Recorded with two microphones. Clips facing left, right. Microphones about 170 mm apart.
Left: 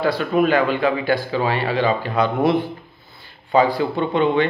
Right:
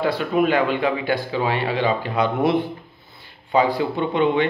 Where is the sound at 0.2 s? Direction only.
20° right (ahead or behind).